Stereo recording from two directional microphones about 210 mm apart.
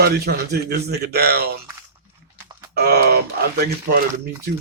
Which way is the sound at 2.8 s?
50° right (ahead or behind).